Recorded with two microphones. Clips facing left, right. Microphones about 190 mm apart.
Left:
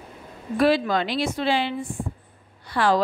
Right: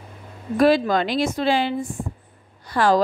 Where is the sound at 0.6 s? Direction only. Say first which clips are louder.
Right 3 dB; 45° right (ahead or behind).